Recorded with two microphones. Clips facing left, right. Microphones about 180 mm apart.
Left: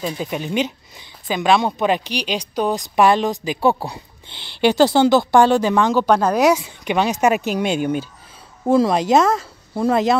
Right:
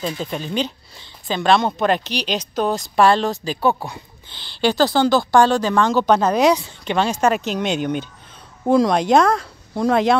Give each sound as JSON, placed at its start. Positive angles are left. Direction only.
{"t": 0.2, "sound": "speech", "side_deg": 10}
{"t": 4.6, "sound": "a woman's voice", "side_deg": 20}